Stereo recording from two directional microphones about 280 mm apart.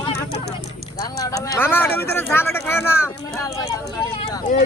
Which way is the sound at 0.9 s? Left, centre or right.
Centre.